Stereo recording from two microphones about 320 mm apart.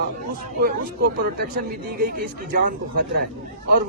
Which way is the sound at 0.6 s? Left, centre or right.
Right.